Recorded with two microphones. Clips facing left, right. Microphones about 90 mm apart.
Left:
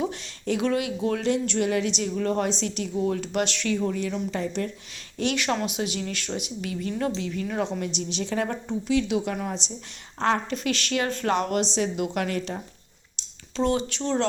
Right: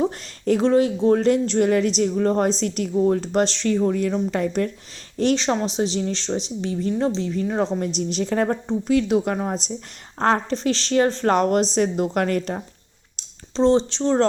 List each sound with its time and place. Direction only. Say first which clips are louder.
0.0 s speech: right 6 dB; 40° right (ahead or behind)
2.9 s speech: right 7 dB; 35° right (ahead or behind)
5.1 s speech: right 5 dB; 35° right (ahead or behind)
13.6 s speech: right 7 dB; 30° right (ahead or behind)